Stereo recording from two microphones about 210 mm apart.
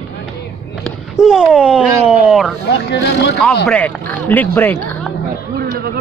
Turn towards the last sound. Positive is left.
turn(degrees=10)  # may be behind; listen again after turning